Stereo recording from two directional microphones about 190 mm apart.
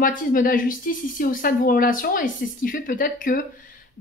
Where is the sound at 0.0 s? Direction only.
45° left (ahead or behind).